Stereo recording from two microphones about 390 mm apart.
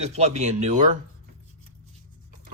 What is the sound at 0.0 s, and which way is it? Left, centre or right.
Speech, centre.